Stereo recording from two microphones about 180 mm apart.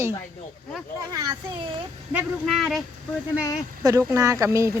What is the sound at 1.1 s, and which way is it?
Speech, 20° right (ahead or behind).